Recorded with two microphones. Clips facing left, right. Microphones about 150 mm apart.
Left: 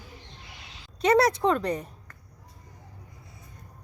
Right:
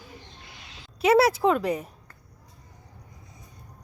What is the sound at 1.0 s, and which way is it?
A woman's voice, 5° right (ahead or behind).